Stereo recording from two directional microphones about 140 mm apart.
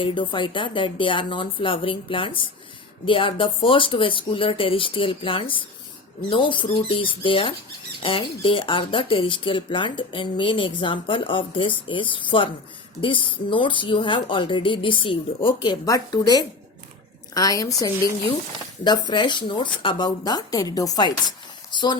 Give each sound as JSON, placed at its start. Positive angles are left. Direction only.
{"t": 0.0, "sound": "speech", "side_deg": 35}